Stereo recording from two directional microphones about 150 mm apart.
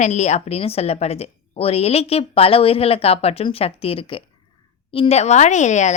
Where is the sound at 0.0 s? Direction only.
50° left (ahead or behind).